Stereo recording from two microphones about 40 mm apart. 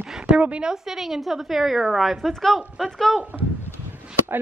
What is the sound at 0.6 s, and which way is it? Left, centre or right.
A woman's voice, centre.